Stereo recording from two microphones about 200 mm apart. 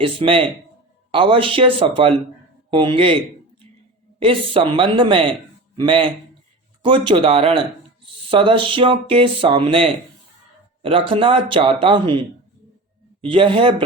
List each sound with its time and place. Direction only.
0.0 s speech: 25° right (ahead or behind)
4.2 s a man's voice: 25° right (ahead or behind)
13.2 s speech: 25° right (ahead or behind)